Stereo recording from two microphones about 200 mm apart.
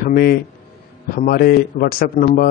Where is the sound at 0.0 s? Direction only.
50° left (ahead or behind).